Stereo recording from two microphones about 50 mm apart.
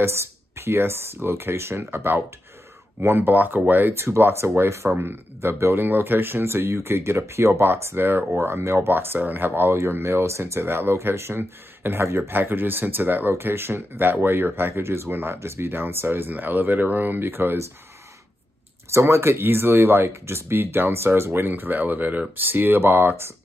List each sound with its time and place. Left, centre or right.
0.0 s speech: right
3.2 s speech: right
3.9 s speech: right
4.9 s speech: right
7.6 s speech: right
10.6 s speech: right
13.3 s speech: right
15.3 s speech: right
16.3 s speech: right
18.9 s speech: right